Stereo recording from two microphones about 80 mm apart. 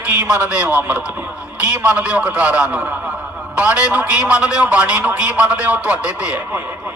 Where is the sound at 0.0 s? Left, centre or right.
Centre.